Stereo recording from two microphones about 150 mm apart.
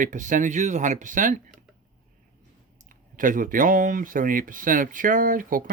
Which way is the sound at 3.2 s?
65° right (ahead or behind).